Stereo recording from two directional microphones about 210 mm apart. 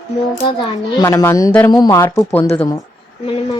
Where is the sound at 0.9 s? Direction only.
15° left (ahead or behind).